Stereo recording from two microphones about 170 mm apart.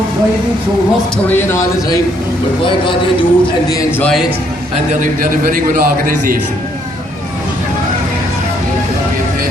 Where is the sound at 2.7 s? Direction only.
30° left (ahead or behind).